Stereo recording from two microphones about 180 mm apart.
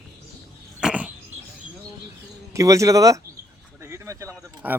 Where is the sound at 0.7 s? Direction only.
5° right (ahead or behind).